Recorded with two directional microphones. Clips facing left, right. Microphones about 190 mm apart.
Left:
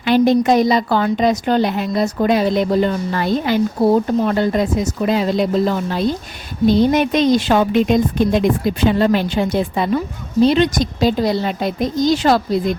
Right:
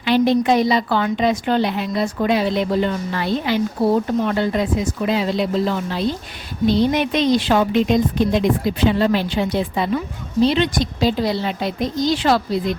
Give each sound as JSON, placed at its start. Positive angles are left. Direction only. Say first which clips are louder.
{"t": 0.0, "sound": "a woman's voice", "louder": "left 3 dB", "side_deg": 45}